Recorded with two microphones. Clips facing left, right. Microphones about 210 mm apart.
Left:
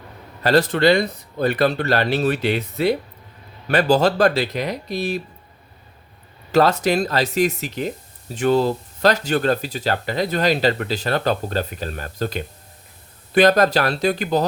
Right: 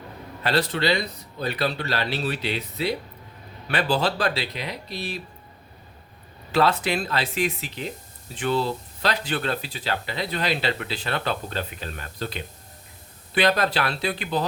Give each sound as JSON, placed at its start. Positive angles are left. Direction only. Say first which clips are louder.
{"t": 0.4, "sound": "speech", "louder": "left 7 dB", "side_deg": 45}
{"t": 6.5, "sound": "speech", "louder": "left 5 dB", "side_deg": 45}